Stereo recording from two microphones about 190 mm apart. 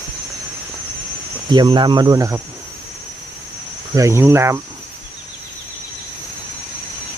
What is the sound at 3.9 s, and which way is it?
Speech, 15° right (ahead or behind).